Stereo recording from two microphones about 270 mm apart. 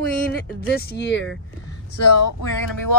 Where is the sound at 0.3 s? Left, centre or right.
Left.